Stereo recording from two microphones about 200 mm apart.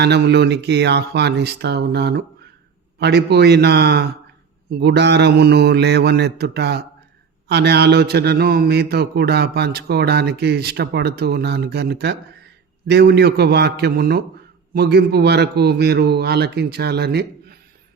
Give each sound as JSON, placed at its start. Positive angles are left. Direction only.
{"t": 0.0, "sound": "a man's voice", "side_deg": -55}